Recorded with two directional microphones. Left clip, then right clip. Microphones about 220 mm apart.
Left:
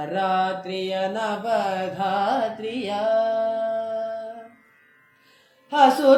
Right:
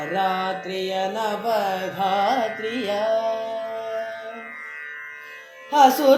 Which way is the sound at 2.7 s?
25° right (ahead or behind).